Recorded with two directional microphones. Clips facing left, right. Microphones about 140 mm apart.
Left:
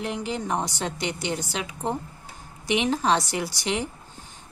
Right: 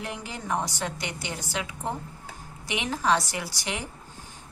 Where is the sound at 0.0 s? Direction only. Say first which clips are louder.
Left 7 dB; 20° left (ahead or behind).